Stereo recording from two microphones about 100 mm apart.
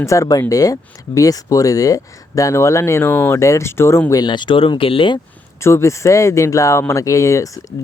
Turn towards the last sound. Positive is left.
turn(degrees=30)  # may be behind; listen again after turning